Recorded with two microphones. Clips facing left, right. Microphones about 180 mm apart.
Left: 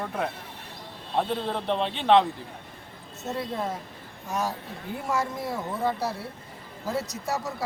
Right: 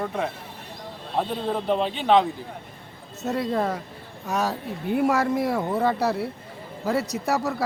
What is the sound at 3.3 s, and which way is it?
Speech, 75° right (ahead or behind).